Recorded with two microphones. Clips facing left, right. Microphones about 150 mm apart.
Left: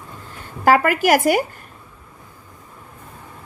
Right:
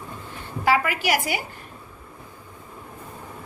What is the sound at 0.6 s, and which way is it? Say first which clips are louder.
Speech: left 7 dB; 45° left (ahead or behind).